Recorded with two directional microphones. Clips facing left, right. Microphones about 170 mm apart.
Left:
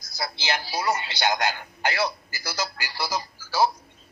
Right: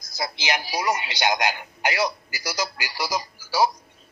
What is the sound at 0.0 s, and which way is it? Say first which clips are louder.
A man's voice: right 2 dB; 20° right (ahead or behind).